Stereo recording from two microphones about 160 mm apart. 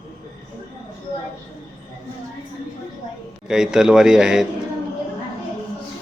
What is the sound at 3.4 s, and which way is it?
A man's voice, 5° right (ahead or behind).